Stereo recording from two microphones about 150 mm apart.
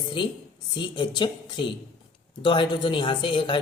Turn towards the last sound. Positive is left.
turn(degrees=35)  # may be behind; listen again after turning